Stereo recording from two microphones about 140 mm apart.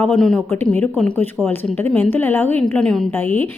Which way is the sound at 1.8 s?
15° left (ahead or behind).